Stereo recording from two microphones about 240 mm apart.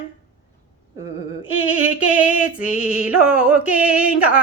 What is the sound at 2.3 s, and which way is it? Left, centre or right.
Female singing, left.